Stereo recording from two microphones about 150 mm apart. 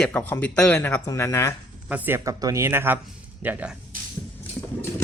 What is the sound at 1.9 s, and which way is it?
Speech, 10° right (ahead or behind).